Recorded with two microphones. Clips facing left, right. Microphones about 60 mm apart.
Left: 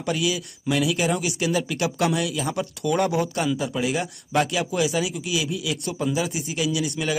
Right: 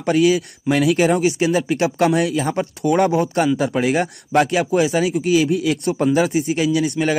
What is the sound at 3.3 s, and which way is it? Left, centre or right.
A man's voice, right.